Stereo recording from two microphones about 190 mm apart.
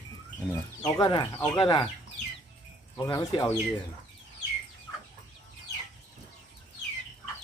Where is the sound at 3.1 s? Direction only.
25° left (ahead or behind).